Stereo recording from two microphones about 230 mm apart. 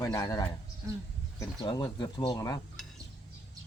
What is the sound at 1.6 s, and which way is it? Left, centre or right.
Speech, centre.